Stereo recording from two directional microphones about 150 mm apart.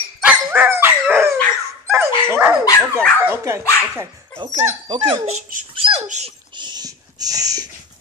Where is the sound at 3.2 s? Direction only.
15° right (ahead or behind).